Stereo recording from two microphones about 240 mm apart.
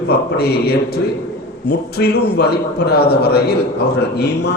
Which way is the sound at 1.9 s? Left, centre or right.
Left.